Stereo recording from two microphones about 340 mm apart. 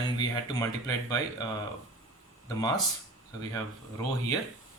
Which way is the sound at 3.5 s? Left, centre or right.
Centre.